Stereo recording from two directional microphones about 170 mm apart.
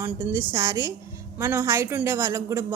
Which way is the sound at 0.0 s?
10° right (ahead or behind).